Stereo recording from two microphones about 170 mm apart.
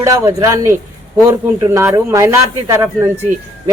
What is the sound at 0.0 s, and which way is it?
A man's voice, 20° right (ahead or behind).